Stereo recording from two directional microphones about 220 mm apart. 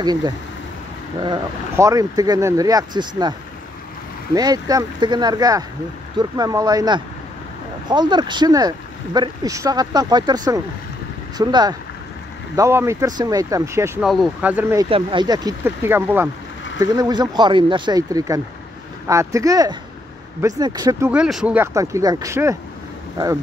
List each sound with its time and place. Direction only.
0.0 s speech: 20° right (ahead or behind)
14.0 s speech: centre (ahead or behind)
14.9 s speech: 25° right (ahead or behind)
21.1 s speech: 5° right (ahead or behind)